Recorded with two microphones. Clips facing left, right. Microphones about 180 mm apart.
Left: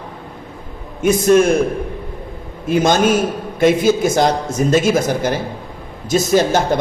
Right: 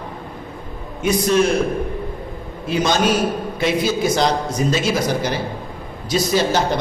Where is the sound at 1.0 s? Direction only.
50° left (ahead or behind).